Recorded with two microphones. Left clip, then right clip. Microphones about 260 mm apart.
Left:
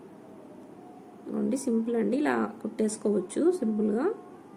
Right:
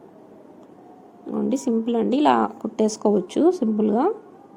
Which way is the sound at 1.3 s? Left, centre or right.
Centre.